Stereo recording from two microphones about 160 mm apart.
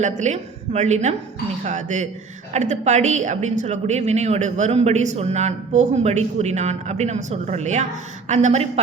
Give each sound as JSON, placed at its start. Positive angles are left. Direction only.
{"t": 0.0, "sound": "a woman's voice", "side_deg": -45}